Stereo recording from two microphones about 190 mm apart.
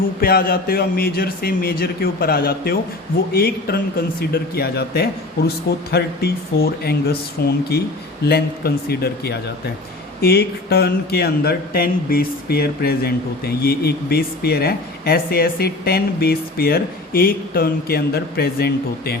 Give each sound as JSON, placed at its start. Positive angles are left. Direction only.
{"t": 0.2, "sound": "a man's voice", "side_deg": 50}